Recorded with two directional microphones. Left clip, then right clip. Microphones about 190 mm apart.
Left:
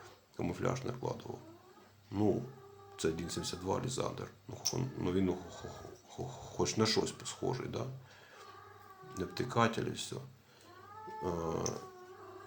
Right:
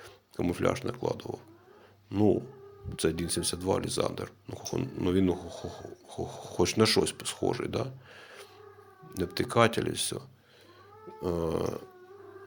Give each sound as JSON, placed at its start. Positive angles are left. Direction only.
{"t": 0.0, "sound": "speech", "side_deg": -35}
{"t": 9.1, "sound": "speech", "side_deg": -35}
{"t": 11.2, "sound": "speech", "side_deg": -40}